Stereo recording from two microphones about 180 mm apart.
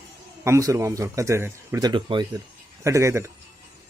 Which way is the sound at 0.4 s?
15° right (ahead or behind).